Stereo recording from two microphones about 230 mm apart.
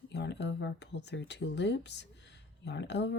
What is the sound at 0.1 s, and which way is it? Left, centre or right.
Speech, left.